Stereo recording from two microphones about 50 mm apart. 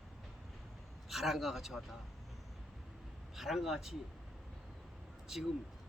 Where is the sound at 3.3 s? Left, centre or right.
Centre.